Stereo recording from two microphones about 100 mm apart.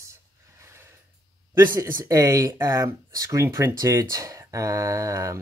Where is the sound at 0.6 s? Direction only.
25° right (ahead or behind).